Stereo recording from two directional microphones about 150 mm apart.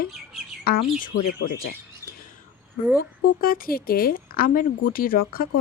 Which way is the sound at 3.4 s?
75° left (ahead or behind).